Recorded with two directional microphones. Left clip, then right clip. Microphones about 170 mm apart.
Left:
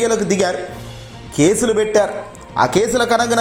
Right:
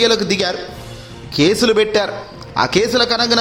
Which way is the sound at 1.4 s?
20° right (ahead or behind).